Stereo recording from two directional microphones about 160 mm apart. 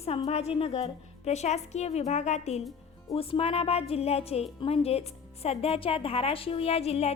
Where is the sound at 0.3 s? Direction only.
40° left (ahead or behind).